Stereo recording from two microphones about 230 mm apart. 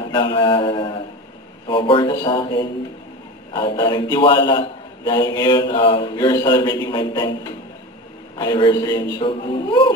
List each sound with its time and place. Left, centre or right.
0.1 s mantra: centre
2.2 s a man's voice: centre
9.2 s mantra: left